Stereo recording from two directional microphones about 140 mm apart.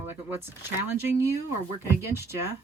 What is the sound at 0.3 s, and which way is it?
Speech, 15° right (ahead or behind).